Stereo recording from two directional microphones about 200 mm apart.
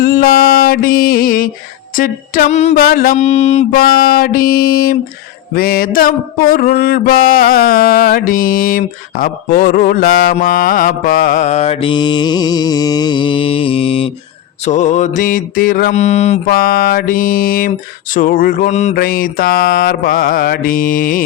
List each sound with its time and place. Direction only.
0.0 s mantra: 50° left (ahead or behind)
2.0 s music: 45° left (ahead or behind)
2.8 s music: 50° left (ahead or behind)
3.2 s mantra: 35° left (ahead or behind)
3.8 s music: 50° left (ahead or behind)
10.3 s mantra: 45° left (ahead or behind); by 14.1 s 30° left (ahead or behind)
14.6 s music: 35° left (ahead or behind)
18.9 s music: 45° left (ahead or behind)